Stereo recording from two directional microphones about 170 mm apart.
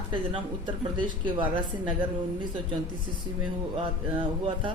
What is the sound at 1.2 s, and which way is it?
A man's voice, 30° right (ahead or behind).